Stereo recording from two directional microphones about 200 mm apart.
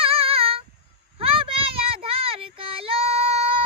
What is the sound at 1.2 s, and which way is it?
Child singing, 25° right (ahead or behind).